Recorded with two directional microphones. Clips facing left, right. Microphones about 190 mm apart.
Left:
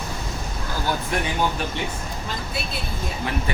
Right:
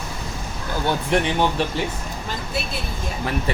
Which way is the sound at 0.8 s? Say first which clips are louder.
Right 5 dB; 25° right (ahead or behind).